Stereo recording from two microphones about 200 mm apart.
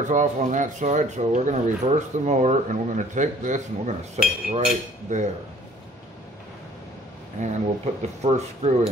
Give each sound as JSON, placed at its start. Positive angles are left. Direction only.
{"t": 0.0, "sound": "speech", "side_deg": -40}
{"t": 7.3, "sound": "speech", "side_deg": -35}